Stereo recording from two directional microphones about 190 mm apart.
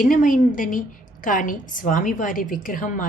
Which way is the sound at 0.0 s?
45° left (ahead or behind).